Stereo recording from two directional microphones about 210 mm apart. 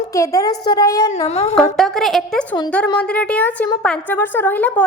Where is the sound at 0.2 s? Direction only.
15° left (ahead or behind).